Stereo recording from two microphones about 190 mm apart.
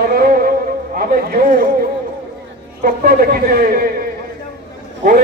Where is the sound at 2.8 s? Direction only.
50° right (ahead or behind).